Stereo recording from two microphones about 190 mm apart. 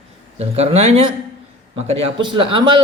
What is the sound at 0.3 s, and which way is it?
Speech, 35° right (ahead or behind).